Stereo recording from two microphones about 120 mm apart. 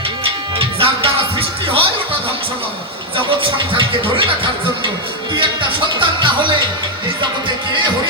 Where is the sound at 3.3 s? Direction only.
45° right (ahead or behind).